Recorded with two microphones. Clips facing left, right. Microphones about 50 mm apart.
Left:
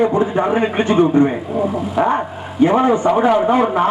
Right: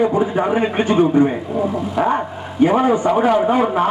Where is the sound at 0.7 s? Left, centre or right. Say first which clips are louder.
Left 1 dB; left.